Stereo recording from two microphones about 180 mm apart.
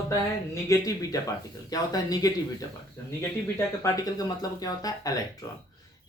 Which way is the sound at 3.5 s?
20° left (ahead or behind).